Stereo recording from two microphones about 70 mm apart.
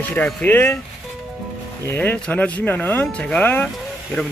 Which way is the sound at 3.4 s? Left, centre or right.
Left.